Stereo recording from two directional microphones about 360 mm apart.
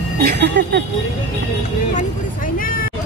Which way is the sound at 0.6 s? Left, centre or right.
Right.